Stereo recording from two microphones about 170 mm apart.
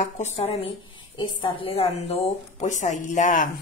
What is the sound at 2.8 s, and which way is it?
Speech, 45° left (ahead or behind).